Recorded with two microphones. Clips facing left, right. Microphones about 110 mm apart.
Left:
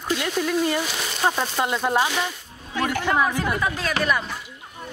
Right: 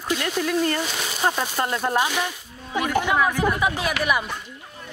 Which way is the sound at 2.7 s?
15° right (ahead or behind).